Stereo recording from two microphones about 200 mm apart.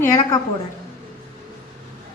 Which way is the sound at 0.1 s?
15° left (ahead or behind).